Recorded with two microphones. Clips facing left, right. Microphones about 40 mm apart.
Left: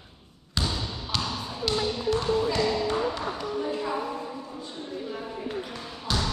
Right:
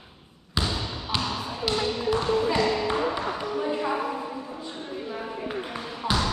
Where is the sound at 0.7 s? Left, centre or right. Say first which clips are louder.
Right 2 dB; centre.